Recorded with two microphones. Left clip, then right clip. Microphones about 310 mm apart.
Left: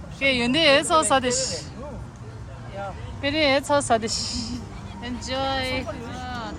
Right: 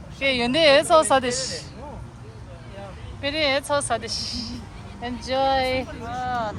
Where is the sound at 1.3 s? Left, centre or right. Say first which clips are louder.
Left 2 dB; centre.